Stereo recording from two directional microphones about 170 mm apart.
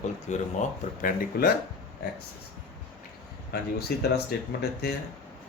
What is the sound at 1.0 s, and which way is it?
Speech, 60° left (ahead or behind).